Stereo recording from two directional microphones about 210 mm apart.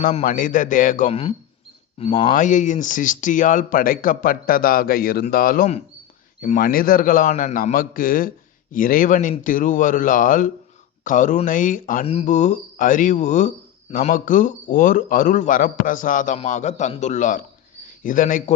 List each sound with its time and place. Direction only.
0.0 s speech: 35° left (ahead or behind)